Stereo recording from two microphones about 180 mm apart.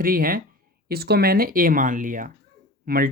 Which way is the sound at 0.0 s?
55° right (ahead or behind).